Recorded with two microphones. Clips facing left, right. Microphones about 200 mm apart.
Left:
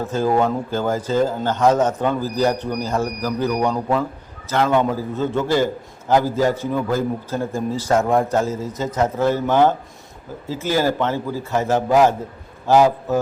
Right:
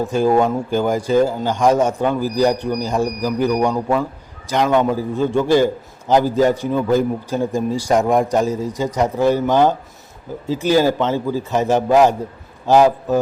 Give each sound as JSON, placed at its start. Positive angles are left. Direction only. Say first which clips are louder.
{"t": 0.0, "sound": "a man's voice", "louder": "right 3 dB", "side_deg": -15}